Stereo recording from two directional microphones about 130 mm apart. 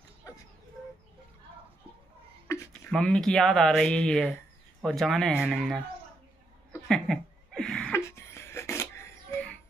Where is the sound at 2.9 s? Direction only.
5° left (ahead or behind).